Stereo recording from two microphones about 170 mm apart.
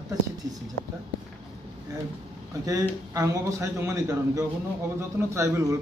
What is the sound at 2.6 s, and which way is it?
A man's voice, 20° right (ahead or behind).